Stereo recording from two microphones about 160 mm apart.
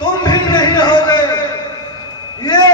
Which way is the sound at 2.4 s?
25° left (ahead or behind).